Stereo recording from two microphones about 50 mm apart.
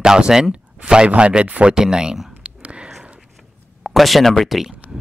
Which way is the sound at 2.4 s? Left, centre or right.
Right.